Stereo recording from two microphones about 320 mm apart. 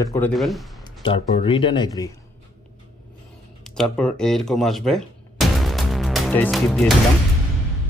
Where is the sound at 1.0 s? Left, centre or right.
Centre.